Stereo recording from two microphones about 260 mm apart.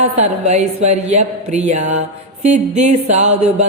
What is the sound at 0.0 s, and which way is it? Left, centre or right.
Mantra, right.